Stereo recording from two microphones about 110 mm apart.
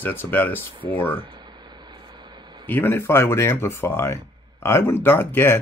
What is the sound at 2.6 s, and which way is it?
Speech, 20° left (ahead or behind).